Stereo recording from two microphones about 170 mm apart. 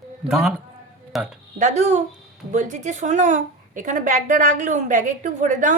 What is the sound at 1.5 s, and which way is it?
A woman's voice, 45° right (ahead or behind).